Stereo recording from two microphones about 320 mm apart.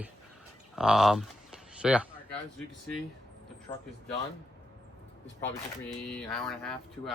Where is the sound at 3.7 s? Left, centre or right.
Centre.